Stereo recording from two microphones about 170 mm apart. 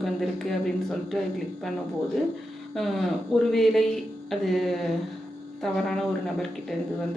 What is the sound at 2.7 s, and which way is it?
Speech, centre (ahead or behind).